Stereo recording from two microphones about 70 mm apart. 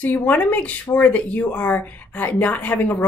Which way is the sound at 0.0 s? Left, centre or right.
Left.